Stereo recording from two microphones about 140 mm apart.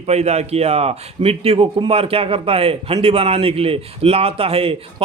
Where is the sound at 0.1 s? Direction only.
50° right (ahead or behind).